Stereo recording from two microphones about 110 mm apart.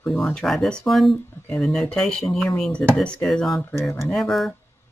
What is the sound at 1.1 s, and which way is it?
Speech, 20° left (ahead or behind).